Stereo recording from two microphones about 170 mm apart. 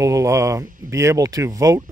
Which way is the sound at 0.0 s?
20° right (ahead or behind).